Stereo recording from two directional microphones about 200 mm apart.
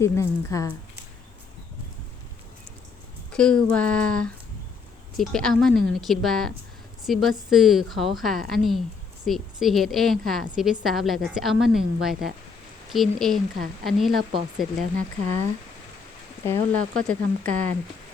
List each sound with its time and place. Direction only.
0.0 s speech: 15° left (ahead or behind)
3.3 s a woman's voice: 5° left (ahead or behind)
14.9 s speech: 35° right (ahead or behind)
16.5 s speech: 5° left (ahead or behind)
17.4 s speech: 35° right (ahead or behind)